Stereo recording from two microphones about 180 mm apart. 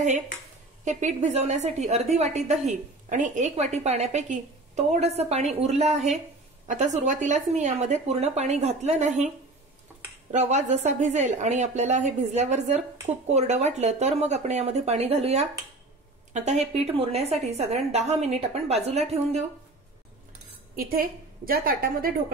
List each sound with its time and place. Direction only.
0.8 s a woman's voice: 40° right (ahead or behind)
10.3 s a woman's voice: 40° right (ahead or behind)
20.7 s a woman's voice: 55° right (ahead or behind)